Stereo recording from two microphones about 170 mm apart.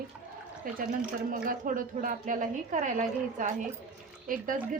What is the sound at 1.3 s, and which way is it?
A woman's voice, 55° right (ahead or behind).